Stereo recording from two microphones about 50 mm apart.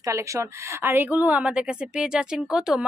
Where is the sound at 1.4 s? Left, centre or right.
Right.